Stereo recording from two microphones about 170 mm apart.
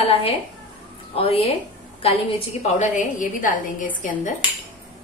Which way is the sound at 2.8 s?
50° left (ahead or behind).